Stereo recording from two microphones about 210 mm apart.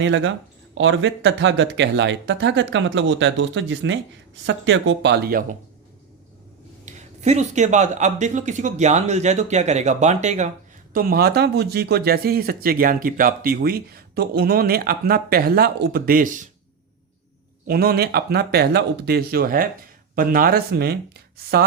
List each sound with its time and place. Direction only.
0.0 s speech: 65° right (ahead or behind); by 5.5 s 45° right (ahead or behind)
6.8 s speech: 35° right (ahead or behind)
10.9 s speech: 45° right (ahead or behind)
17.7 s speech: 50° right (ahead or behind)